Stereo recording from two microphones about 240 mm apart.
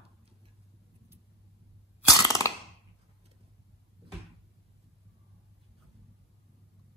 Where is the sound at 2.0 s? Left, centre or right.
Centre.